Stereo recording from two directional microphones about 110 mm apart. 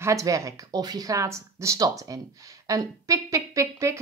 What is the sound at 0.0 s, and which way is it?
Speech, 30° right (ahead or behind).